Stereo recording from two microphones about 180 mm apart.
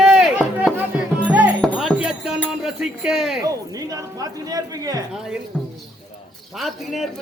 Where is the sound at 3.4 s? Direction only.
20° right (ahead or behind).